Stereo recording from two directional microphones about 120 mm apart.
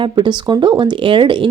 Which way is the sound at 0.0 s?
40° right (ahead or behind).